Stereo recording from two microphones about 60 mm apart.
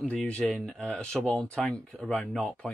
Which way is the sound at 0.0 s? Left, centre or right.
Left.